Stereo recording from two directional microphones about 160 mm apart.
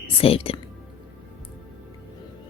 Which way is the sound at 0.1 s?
35° left (ahead or behind).